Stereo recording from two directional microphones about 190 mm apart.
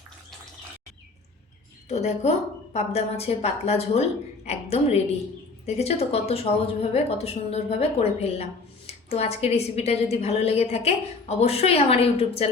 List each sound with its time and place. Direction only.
1.9 s a woman's voice: 35° left (ahead or behind)